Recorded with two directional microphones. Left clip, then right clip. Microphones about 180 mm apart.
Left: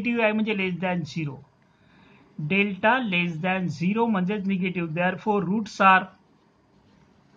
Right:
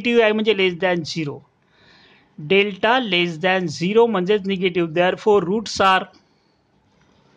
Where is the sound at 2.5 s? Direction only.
55° right (ahead or behind).